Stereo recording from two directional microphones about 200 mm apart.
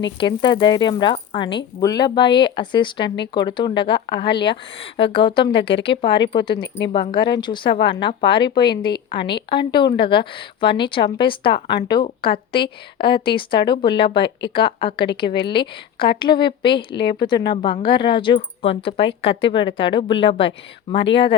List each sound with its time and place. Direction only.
0.2 s speech: 25° left (ahead or behind)